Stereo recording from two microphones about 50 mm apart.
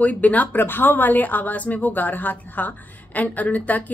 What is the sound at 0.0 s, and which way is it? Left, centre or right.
A woman's voice, left.